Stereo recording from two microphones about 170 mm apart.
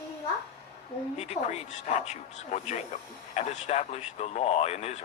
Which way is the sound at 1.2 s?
40° left (ahead or behind).